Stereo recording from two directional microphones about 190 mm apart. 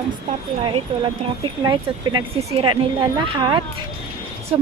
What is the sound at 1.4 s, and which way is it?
Speech, 20° right (ahead or behind).